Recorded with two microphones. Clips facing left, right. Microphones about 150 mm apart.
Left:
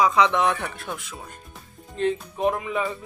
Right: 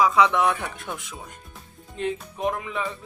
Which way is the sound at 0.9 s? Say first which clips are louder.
Left 1 dB; 20° right (ahead or behind).